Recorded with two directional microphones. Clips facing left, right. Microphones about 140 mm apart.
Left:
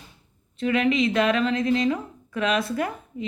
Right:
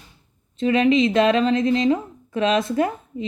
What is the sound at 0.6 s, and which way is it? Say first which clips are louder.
A woman's voice: right 4 dB; 25° right (ahead or behind).